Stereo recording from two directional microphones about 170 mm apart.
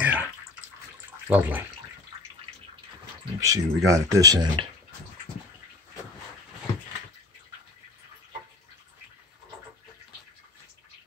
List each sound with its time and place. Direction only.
0.0 s bathtub: 10° right (ahead or behind)
1.2 s speech: 10° right (ahead or behind)
3.3 s speech: 20° right (ahead or behind)